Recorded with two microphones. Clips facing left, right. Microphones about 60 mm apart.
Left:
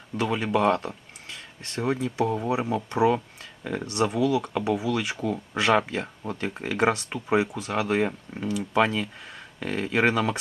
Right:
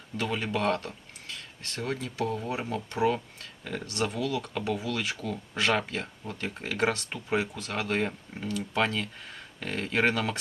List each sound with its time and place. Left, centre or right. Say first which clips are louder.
0.2 s speech: left 6 dB; centre